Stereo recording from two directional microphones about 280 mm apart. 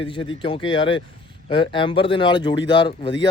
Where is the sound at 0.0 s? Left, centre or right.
Centre.